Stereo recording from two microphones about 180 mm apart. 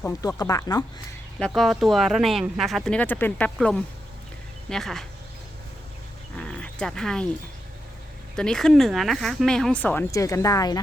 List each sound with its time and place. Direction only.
0.0 s speech: 20° left (ahead or behind)
1.4 s speech: centre (ahead or behind)
6.3 s roaring cats: 5° left (ahead or behind)
8.4 s speech: 5° left (ahead or behind); by 10.8 s 20° left (ahead or behind)